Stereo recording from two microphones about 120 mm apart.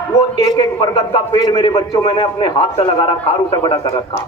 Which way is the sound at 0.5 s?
40° left (ahead or behind).